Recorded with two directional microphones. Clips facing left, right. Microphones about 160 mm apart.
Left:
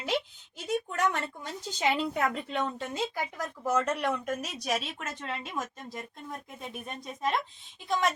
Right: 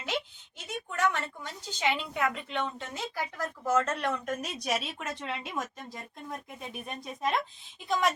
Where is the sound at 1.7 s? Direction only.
35° left (ahead or behind).